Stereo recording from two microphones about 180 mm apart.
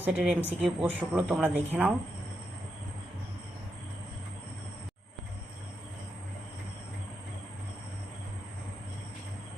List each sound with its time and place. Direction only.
0.0 s speech: 10° right (ahead or behind)